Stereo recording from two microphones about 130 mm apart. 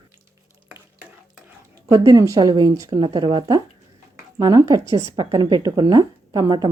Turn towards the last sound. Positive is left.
turn(degrees=-30)  # may be behind; listen again after turning